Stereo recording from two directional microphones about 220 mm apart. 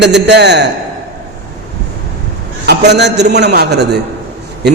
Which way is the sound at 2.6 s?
50° right (ahead or behind).